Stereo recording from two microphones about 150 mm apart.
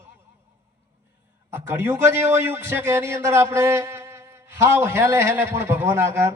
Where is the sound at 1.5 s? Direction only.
15° right (ahead or behind).